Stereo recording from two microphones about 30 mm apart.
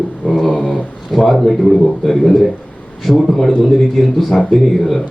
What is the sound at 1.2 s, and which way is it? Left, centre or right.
Speech, centre.